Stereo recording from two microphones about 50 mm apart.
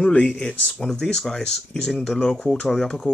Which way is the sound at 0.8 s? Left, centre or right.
Centre.